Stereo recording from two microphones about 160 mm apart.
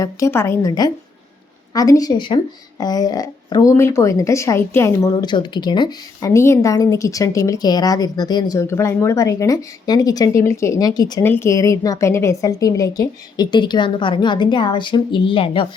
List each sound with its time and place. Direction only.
0.0 s speech: 20° left (ahead or behind); by 15.6 s 35° left (ahead or behind)